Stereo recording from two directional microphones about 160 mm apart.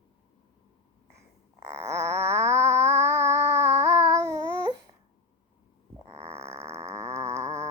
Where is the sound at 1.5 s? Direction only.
20° right (ahead or behind).